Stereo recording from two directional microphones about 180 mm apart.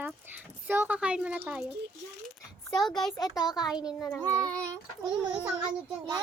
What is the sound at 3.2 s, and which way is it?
Speech, 20° left (ahead or behind).